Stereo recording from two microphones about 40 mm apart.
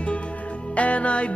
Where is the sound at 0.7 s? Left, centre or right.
Left.